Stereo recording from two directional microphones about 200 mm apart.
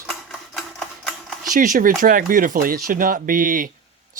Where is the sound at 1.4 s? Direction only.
45° right (ahead or behind).